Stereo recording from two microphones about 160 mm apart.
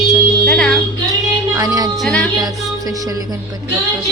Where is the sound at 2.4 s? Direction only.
20° right (ahead or behind).